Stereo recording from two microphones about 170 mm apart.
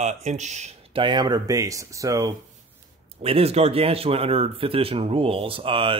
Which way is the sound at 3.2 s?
35° right (ahead or behind).